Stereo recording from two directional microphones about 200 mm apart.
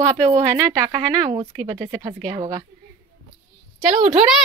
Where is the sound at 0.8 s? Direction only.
20° right (ahead or behind).